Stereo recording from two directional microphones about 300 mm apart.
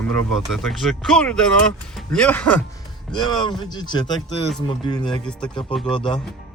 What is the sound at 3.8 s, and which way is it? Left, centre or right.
Speech, centre.